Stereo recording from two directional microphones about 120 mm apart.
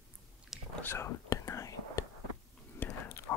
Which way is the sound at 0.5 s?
5° right (ahead or behind).